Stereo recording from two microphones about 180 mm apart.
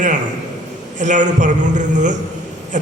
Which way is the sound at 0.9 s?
45° right (ahead or behind).